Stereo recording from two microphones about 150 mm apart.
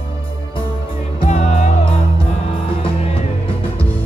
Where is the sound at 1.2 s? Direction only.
50° left (ahead or behind).